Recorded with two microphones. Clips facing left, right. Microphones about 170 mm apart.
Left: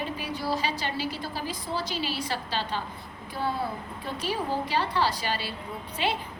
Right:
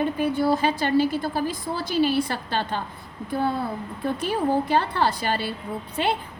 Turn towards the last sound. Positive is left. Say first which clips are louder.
# right 5 dB
turn(degrees=-50)  # may be behind; listen again after turning